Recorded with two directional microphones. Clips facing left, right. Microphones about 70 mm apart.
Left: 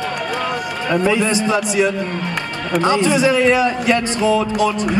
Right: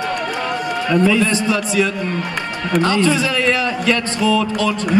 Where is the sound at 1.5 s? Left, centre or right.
Left.